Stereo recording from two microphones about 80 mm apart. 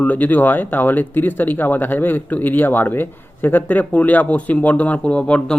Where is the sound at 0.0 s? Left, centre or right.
Left.